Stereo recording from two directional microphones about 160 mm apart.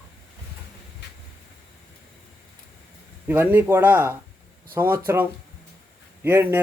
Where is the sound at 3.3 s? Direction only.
10° right (ahead or behind).